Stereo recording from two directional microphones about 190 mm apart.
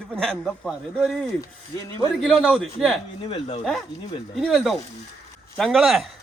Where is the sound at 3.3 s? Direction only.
30° left (ahead or behind).